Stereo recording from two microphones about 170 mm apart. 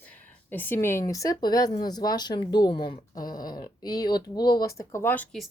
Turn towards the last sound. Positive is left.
turn(degrees=10)  # may be behind; listen again after turning